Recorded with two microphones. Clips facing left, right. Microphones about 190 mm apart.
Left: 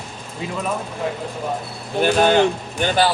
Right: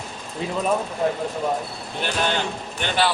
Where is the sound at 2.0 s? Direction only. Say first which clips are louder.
Left 10 dB; 50° left (ahead or behind).